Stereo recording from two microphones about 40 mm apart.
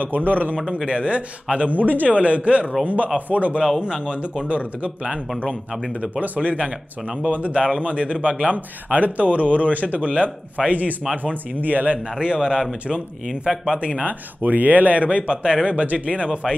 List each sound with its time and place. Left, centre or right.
0.0 s speech: right
0.8 s speech: right
1.7 s speech: right
3.8 s speech: right
12.2 s speech: right
13.7 s speech: right
14.0 s speech: right
15.7 s speech: right